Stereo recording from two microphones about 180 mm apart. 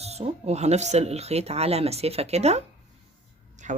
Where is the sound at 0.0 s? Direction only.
35° right (ahead or behind).